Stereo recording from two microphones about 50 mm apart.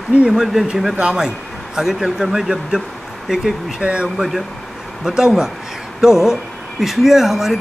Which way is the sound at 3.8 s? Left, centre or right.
Right.